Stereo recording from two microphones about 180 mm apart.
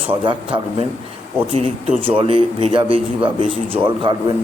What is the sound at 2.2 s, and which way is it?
Speech, 30° right (ahead or behind).